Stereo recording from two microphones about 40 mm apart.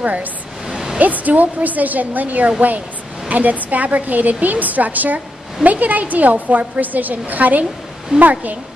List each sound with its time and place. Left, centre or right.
0.0 s speech: right
0.7 s a sound: centre
0.9 s a woman's voice: right